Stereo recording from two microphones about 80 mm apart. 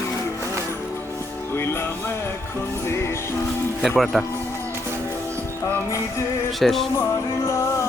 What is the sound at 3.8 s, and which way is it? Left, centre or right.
Speech, centre.